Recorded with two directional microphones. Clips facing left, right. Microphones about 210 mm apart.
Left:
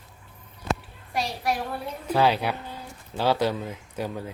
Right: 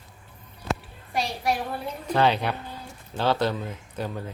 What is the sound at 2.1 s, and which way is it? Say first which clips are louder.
A man's voice: even; 5° left (ahead or behind).